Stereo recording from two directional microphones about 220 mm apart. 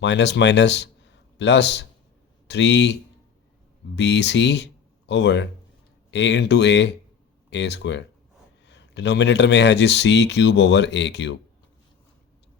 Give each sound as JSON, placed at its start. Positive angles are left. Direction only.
{"t": 0.0, "sound": "speech", "side_deg": 50}